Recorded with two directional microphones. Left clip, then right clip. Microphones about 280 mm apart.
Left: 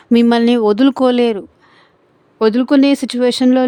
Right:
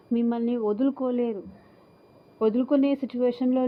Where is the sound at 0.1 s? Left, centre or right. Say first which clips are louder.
Left 15 dB; left.